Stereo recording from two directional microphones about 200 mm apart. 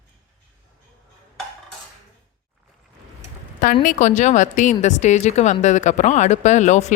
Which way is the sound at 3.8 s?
40° left (ahead or behind).